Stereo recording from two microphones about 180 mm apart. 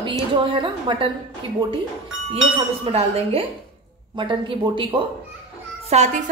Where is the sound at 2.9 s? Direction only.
35° right (ahead or behind).